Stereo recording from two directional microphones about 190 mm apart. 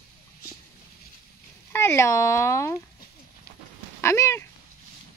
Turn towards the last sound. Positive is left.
turn(degrees=15)  # may be behind; listen again after turning